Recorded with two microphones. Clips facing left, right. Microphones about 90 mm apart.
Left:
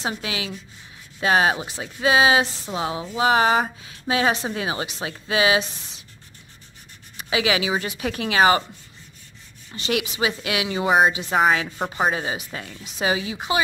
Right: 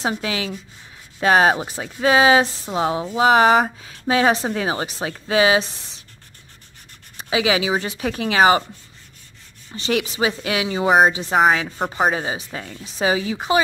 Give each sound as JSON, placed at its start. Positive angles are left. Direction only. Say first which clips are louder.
{"t": 0.0, "sound": "a woman's voice", "louder": "right 4 dB", "side_deg": -35}
{"t": 7.2, "sound": "speech", "louder": "right 3 dB", "side_deg": -30}
{"t": 9.8, "sound": "a woman's voice", "louder": "right 3 dB", "side_deg": -35}